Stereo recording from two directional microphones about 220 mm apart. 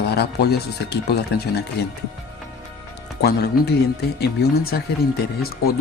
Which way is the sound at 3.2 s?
45° left (ahead or behind).